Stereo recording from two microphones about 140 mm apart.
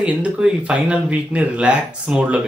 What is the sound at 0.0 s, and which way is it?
Speech, 10° right (ahead or behind).